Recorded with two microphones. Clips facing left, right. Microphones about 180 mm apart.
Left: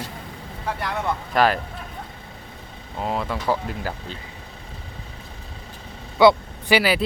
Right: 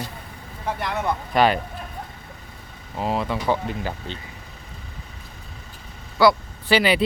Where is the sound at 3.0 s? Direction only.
Centre (ahead or behind).